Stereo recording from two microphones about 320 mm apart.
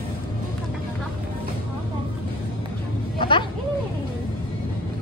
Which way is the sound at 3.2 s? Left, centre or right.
Centre.